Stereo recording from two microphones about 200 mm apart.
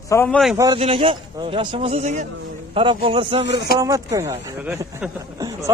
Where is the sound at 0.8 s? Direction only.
30° right (ahead or behind).